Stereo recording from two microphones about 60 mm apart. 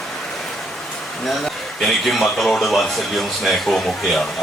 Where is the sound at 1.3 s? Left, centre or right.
Centre.